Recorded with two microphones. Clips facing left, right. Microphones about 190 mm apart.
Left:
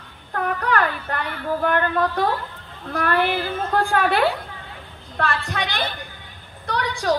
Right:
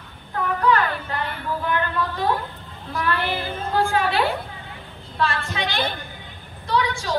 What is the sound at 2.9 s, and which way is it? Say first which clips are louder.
A woman's voice: left 4 dB; 60° left (ahead or behind).